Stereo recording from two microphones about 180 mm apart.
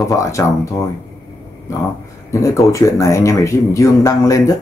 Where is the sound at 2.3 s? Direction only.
15° left (ahead or behind).